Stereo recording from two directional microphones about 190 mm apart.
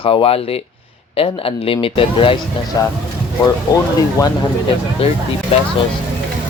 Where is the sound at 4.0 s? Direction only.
20° left (ahead or behind).